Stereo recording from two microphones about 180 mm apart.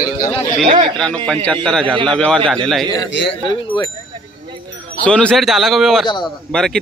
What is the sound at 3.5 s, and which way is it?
Speech, 25° left (ahead or behind).